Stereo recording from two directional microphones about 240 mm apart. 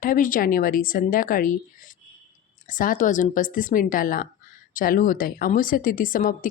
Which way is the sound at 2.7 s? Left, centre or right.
Left.